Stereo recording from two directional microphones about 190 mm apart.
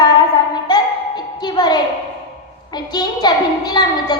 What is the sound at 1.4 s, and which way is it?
Speech, 20° left (ahead or behind).